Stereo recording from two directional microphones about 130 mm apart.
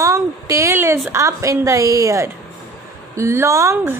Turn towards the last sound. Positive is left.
turn(degrees=-20)  # may be behind; listen again after turning